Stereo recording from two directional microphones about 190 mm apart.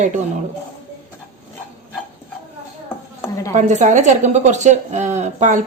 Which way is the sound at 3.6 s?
40° right (ahead or behind).